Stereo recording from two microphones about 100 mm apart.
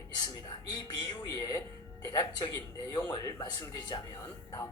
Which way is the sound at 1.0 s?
40° left (ahead or behind).